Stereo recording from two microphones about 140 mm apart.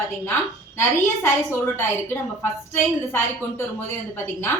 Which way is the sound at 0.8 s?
15° left (ahead or behind).